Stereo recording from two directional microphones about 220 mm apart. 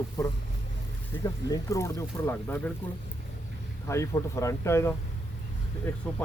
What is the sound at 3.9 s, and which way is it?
Speech, 15° left (ahead or behind).